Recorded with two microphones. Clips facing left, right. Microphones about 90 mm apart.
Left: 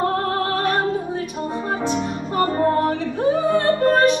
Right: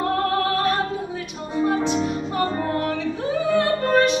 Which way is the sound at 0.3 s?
35° left (ahead or behind).